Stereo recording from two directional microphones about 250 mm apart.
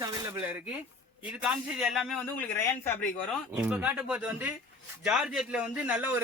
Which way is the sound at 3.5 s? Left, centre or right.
Centre.